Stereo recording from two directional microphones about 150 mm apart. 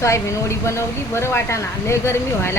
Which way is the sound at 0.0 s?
20° left (ahead or behind).